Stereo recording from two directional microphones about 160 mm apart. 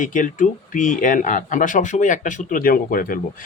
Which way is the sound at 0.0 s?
55° left (ahead or behind).